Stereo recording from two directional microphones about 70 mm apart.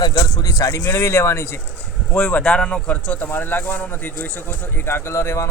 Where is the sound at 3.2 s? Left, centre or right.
Left.